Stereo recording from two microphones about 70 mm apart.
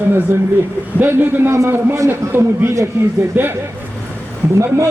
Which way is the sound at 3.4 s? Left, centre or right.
Right.